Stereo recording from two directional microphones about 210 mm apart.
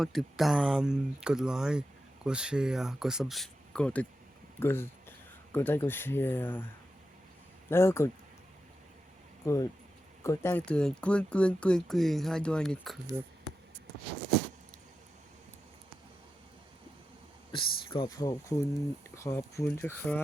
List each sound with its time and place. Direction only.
0.0 s speech: centre (ahead or behind)
7.7 s speech: 10° left (ahead or behind)
10.2 s speech: 10° left (ahead or behind)
17.5 s speech: 25° left (ahead or behind); by 20.2 s 10° left (ahead or behind)